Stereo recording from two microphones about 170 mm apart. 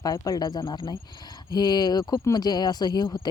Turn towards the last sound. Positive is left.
turn(degrees=25)  # may be behind; listen again after turning